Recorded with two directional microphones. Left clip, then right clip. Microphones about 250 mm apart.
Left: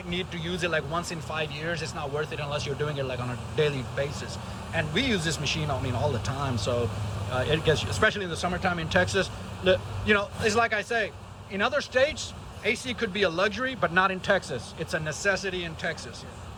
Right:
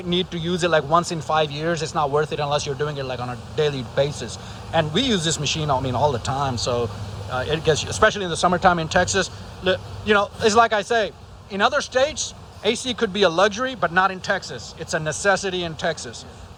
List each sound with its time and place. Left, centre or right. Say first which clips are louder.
0.1 s speech: right 8 dB; centre